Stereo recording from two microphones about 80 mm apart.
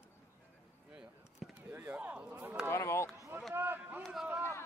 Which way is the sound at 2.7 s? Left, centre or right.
Left.